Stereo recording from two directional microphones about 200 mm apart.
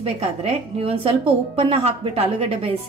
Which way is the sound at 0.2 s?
30° right (ahead or behind).